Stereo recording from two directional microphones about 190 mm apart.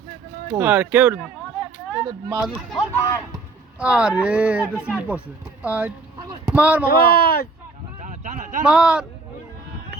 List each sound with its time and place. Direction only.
0.5 s speech: 10° right (ahead or behind)
2.4 s speech: 5° right (ahead or behind)
2.7 s speech: 20° left (ahead or behind)
3.8 s speech: 5° right (ahead or behind)
7.0 s speech: 55° left (ahead or behind)
8.0 s a sound: 40° right (ahead or behind)
8.6 s speech: 5° right (ahead or behind)